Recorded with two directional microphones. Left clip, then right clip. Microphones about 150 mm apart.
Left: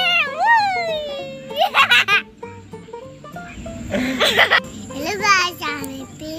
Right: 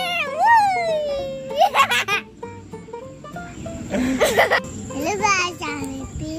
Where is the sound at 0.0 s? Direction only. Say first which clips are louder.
Left 2 dB; 15° right (ahead or behind).